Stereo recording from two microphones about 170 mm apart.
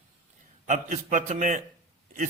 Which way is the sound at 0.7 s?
45° right (ahead or behind).